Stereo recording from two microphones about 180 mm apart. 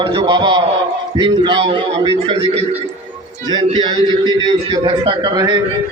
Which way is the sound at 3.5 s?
30° right (ahead or behind).